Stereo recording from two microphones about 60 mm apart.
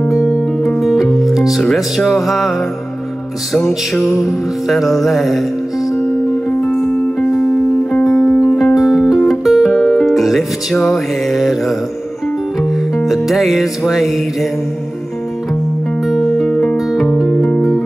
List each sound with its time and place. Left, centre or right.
0.1 s music: centre
3.5 s music: centre
6.7 s music: left
8.0 s music: centre
12.9 s music: centre
16.1 s music: centre
16.4 s music: centre
16.7 s music: centre